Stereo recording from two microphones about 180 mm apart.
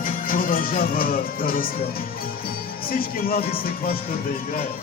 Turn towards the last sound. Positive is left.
turn(degrees=55)  # may be behind; listen again after turning